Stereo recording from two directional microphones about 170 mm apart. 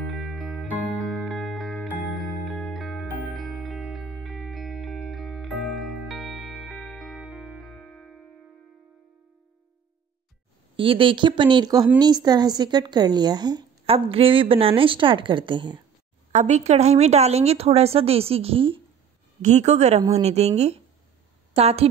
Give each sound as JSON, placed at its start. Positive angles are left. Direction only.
{"t": 0.0, "sound": "music", "side_deg": 0}
{"t": 10.8, "sound": "a woman's voice", "side_deg": -30}
{"t": 16.3, "sound": "a woman's voice", "side_deg": -40}